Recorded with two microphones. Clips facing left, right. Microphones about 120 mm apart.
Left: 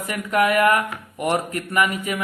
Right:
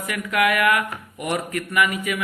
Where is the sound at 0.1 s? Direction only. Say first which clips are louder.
Left 2 dB; 35° left (ahead or behind).